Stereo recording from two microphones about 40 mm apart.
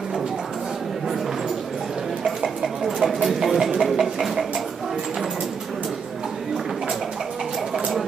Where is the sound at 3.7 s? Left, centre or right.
Centre.